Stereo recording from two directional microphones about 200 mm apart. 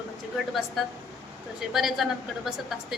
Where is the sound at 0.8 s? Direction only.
Centre (ahead or behind).